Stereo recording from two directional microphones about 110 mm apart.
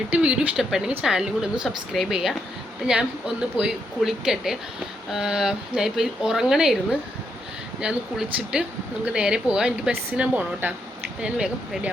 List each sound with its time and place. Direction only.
0.1 s speech: 10° right (ahead or behind)
7.8 s speech: 5° right (ahead or behind)